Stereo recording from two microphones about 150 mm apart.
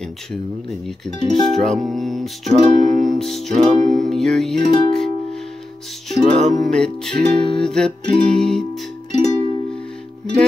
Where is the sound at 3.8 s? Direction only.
Centre (ahead or behind).